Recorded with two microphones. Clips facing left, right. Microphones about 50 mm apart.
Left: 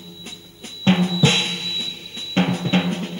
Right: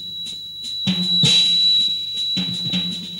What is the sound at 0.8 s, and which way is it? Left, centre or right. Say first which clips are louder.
Drum: left 4 dB; left.